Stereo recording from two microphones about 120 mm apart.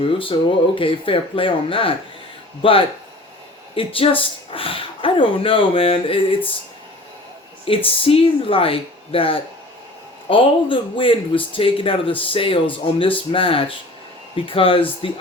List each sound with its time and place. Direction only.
0.0 s a man's voice: 45° left (ahead or behind)
7.9 s a man's voice: 50° left (ahead or behind)